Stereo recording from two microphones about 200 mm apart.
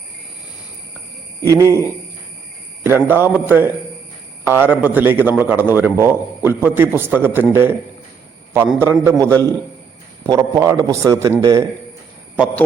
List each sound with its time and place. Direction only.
1.4 s a man's voice: 15° right (ahead or behind)
2.8 s a man's voice: 10° right (ahead or behind)
10.2 s a man's voice: 15° right (ahead or behind)